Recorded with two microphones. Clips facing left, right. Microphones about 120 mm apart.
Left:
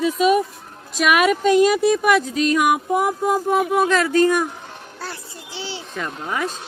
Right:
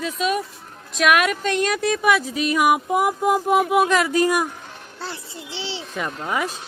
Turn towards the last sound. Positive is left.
turn(degrees=-5)  # may be behind; listen again after turning